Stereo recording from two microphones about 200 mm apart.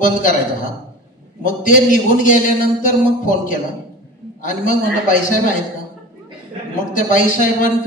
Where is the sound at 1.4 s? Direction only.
40° left (ahead or behind).